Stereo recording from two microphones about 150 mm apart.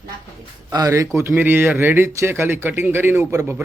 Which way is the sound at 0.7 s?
25° right (ahead or behind).